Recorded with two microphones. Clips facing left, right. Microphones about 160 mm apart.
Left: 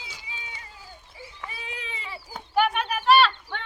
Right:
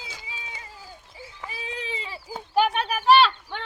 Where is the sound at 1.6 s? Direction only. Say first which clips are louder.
Right 9 dB; 30° right (ahead or behind).